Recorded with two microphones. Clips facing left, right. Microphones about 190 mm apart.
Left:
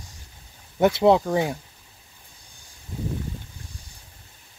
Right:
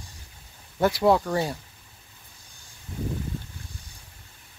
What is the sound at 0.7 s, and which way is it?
Speech, 20° left (ahead or behind).